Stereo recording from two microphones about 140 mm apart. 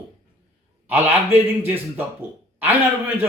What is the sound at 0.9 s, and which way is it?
Speech, 15° right (ahead or behind).